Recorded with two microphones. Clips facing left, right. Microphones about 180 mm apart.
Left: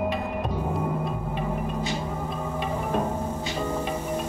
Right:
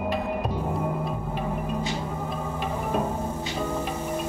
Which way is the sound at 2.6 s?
5° right (ahead or behind).